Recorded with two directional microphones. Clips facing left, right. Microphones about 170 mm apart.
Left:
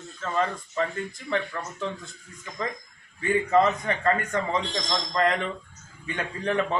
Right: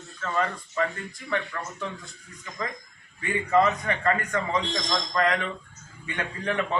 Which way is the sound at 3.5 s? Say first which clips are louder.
Right 1 dB; 20° left (ahead or behind).